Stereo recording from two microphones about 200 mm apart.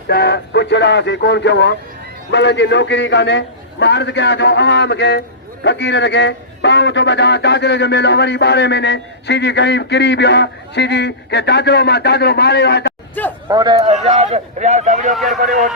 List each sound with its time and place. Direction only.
0.1 s a man's voice: 55° left (ahead or behind)
13.2 s speech: 10° left (ahead or behind)
13.5 s speech: 20° right (ahead or behind); by 15.1 s 35° right (ahead or behind)
15.1 s speech: centre (ahead or behind)
15.4 s a man's voice: 40° right (ahead or behind)